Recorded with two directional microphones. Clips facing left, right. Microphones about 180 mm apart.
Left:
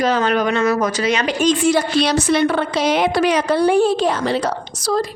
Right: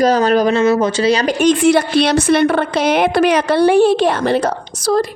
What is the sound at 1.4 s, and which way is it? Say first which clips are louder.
A woman's voice: right 4 dB; 60° right (ahead or behind).